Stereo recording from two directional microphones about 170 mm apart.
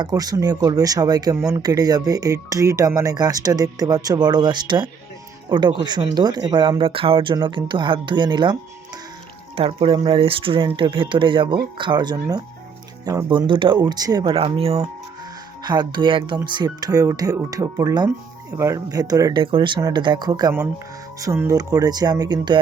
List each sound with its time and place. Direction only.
0.0 s speech: 20° right (ahead or behind)
9.6 s speech: 35° right (ahead or behind)
14.3 s speech: 35° right (ahead or behind)